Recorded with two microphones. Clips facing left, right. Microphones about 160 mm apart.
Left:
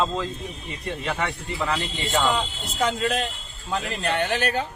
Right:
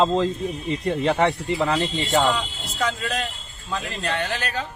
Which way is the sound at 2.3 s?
20° left (ahead or behind).